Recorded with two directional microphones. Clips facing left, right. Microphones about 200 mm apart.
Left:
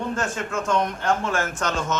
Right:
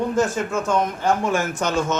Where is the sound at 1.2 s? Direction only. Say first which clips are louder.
Right 3 dB; 15° right (ahead or behind).